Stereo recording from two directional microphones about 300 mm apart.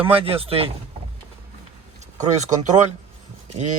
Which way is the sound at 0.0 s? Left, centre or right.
Centre.